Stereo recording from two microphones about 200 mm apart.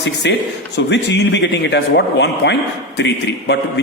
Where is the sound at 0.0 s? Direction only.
60° left (ahead or behind).